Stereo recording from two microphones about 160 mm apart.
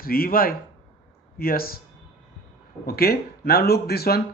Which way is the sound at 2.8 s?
75° left (ahead or behind).